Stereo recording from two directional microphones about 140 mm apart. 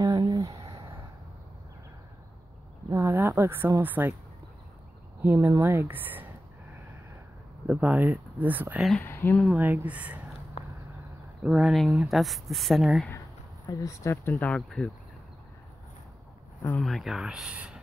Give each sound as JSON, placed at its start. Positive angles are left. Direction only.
{"t": 0.0, "sound": "a sound", "side_deg": -25}
{"t": 2.9, "sound": "speech", "side_deg": -20}
{"t": 5.2, "sound": "speech", "side_deg": -15}
{"t": 7.6, "sound": "speech", "side_deg": -10}
{"t": 9.0, "sound": "speech", "side_deg": 15}
{"t": 9.6, "sound": "speech", "side_deg": -10}
{"t": 11.4, "sound": "speech", "side_deg": -10}
{"t": 13.7, "sound": "speech", "side_deg": 25}
{"t": 16.6, "sound": "speech", "side_deg": 5}